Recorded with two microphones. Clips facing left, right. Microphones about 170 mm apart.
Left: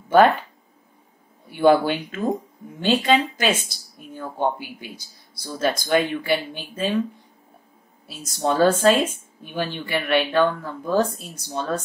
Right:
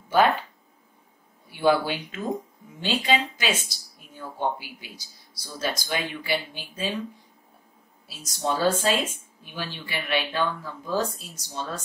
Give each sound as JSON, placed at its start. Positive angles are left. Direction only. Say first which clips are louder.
{"t": 1.5, "sound": "a woman's voice", "louder": "left 5 dB", "side_deg": 55}
{"t": 8.2, "sound": "speech", "louder": "left 6 dB", "side_deg": 55}